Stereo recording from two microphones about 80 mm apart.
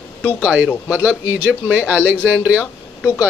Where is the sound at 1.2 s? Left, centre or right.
Right.